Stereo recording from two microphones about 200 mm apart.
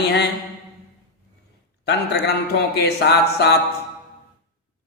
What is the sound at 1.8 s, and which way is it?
Speech, 55° left (ahead or behind).